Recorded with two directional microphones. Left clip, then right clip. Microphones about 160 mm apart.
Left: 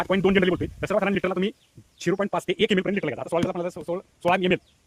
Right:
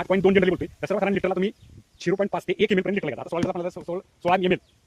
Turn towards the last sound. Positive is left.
turn(degrees=25)  # may be behind; listen again after turning